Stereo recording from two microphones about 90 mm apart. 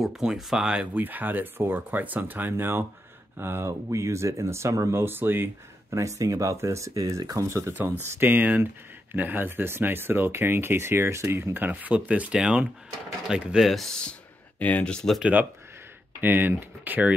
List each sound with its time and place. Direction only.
0.0 s speech: 5° right (ahead or behind)
0.9 s speech: 20° right (ahead or behind); by 5.0 s 35° right (ahead or behind)
5.0 s speech: 25° right (ahead or behind)
14.6 s speech: 15° left (ahead or behind)
16.2 s speech: 20° right (ahead or behind)